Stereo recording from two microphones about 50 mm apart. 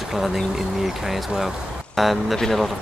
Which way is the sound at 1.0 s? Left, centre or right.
Centre.